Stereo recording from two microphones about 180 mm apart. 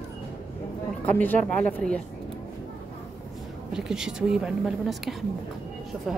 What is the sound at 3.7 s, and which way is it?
A woman's voice, 5° right (ahead or behind).